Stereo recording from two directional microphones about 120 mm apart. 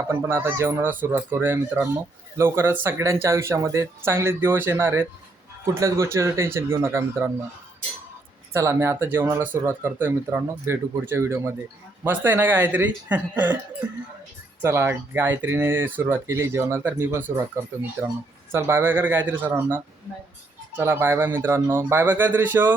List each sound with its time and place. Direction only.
0.1 s speech: 20° right (ahead or behind)
8.5 s a man's voice: 25° right (ahead or behind)
14.6 s a man's voice: 20° right (ahead or behind)